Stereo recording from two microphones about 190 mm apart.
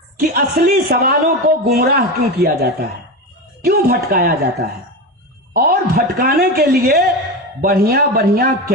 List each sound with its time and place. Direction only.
0.2 s a man's voice: 50° right (ahead or behind)